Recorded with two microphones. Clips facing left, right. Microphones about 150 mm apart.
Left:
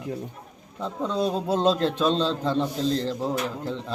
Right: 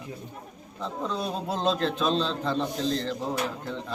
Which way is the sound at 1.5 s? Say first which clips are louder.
Left 2 dB; 30° left (ahead or behind).